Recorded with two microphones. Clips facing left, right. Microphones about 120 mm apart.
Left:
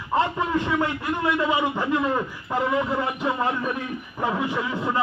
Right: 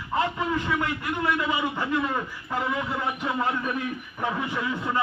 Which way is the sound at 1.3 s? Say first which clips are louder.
Left 4 dB; 15° left (ahead or behind).